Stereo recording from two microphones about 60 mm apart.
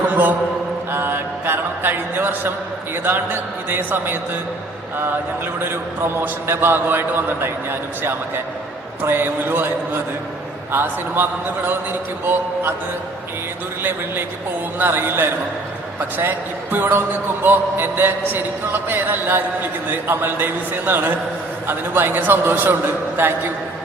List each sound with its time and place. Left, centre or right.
0.1 s a sound: right
2.9 s a man's voice: right
5.5 s a man's voice: right
14.8 s a man's voice: right
16.7 s a man's voice: right